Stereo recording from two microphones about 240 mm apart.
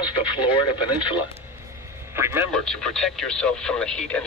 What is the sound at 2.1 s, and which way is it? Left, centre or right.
Speech, centre.